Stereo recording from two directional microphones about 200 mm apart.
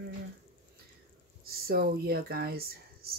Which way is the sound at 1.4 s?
50° right (ahead or behind).